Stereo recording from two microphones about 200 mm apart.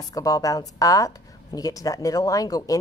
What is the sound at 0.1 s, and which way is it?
Speech, 15° left (ahead or behind).